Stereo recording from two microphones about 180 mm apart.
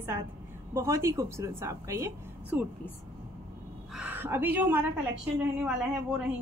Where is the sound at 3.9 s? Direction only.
10° right (ahead or behind).